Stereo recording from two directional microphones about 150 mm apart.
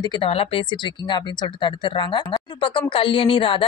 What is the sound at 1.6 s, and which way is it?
Speech, 30° left (ahead or behind).